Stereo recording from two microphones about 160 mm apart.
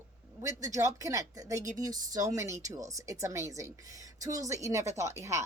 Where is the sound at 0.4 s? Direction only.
20° right (ahead or behind).